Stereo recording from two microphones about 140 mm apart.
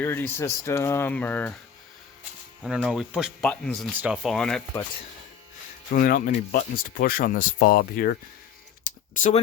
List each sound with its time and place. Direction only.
0.0 s speech: 15° left (ahead or behind)
2.6 s speech: 5° right (ahead or behind)
3.9 s speech: 10° right (ahead or behind)
5.9 s speech: 85° left
9.1 s speech: 65° left (ahead or behind)